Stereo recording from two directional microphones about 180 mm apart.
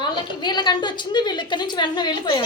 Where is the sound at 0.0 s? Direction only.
25° left (ahead or behind).